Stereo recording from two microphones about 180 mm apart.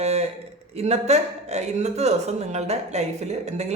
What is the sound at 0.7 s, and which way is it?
Speech, 35° right (ahead or behind).